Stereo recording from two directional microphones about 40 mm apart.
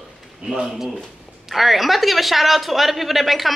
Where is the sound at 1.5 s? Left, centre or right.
Centre.